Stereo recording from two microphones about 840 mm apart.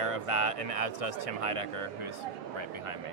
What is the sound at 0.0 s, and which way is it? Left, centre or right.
Speech, right.